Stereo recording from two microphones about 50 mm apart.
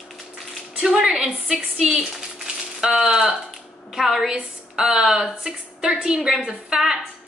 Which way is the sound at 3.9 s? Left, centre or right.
Centre.